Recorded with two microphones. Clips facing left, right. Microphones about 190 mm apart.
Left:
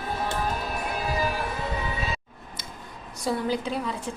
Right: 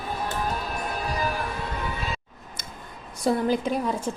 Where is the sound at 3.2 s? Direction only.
50° right (ahead or behind).